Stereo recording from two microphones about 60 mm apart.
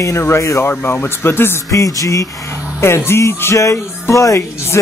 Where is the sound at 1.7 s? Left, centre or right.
Left.